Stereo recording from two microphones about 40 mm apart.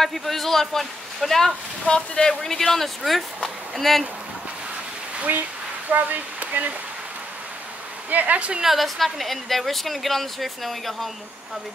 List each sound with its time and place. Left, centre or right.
0.0 s speech: centre
1.9 s speech: left
2.4 s speech: centre
5.3 s speech: right
8.1 s speech: right
8.5 s speech: centre